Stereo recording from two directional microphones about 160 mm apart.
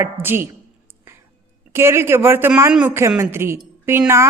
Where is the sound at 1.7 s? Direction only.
15° right (ahead or behind).